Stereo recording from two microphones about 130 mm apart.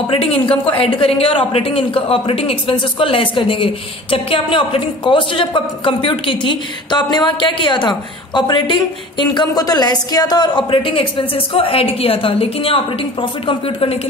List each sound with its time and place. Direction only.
0.1 s speech: 45° left (ahead or behind)